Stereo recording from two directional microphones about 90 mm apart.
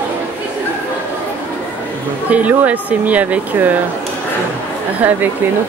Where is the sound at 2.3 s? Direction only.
15° right (ahead or behind).